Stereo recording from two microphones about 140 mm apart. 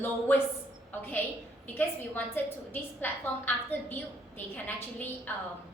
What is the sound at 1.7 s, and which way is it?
A woman's voice, 15° left (ahead or behind).